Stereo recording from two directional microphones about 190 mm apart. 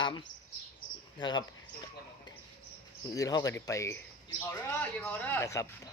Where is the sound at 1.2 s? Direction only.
25° left (ahead or behind).